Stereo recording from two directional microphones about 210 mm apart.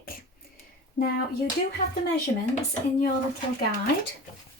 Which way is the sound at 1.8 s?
40° left (ahead or behind).